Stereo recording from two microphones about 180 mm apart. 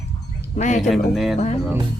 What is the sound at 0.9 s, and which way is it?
Speech, centre (ahead or behind).